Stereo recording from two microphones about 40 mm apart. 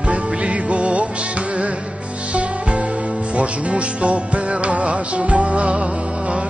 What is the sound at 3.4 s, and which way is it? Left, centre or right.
Music, right.